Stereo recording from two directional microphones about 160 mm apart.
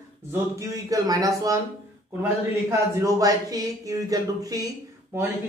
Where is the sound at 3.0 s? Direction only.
20° right (ahead or behind).